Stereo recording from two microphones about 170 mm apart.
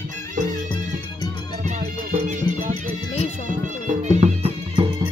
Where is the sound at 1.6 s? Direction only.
50° right (ahead or behind).